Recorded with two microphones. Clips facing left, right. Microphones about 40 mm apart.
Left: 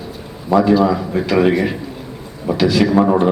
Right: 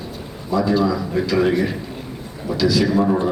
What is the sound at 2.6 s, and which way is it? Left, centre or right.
Speech, left.